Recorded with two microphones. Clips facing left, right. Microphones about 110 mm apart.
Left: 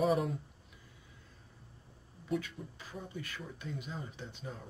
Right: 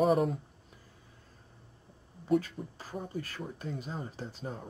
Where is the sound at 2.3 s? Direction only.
40° right (ahead or behind).